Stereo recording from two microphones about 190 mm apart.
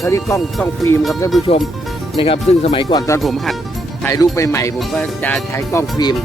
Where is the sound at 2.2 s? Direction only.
30° left (ahead or behind).